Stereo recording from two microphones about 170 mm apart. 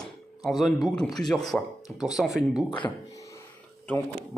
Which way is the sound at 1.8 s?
20° left (ahead or behind).